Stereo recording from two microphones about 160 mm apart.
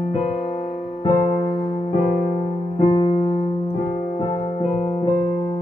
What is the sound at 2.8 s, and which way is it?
Music, 30° left (ahead or behind).